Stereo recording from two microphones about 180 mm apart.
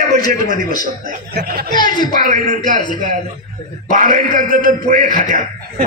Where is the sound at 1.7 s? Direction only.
25° left (ahead or behind).